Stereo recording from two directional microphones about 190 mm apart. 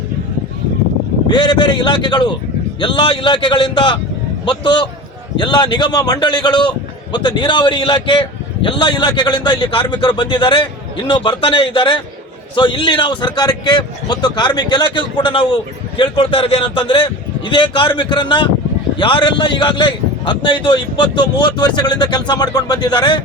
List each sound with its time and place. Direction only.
1.3 s a man's voice: 25° left (ahead or behind)